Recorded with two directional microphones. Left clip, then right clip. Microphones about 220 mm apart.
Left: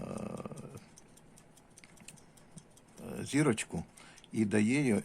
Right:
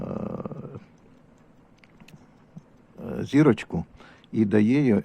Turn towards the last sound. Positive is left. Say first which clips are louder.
# right 9 dB
turn(degrees=-15)  # may be behind; listen again after turning